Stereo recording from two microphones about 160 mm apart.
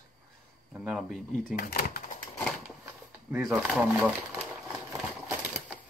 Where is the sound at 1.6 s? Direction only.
65° left (ahead or behind).